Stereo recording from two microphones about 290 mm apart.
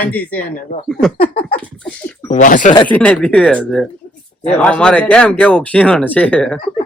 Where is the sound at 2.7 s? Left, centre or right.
Centre.